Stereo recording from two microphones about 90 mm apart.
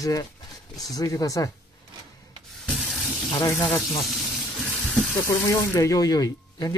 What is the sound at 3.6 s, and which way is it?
Speech, 5° left (ahead or behind).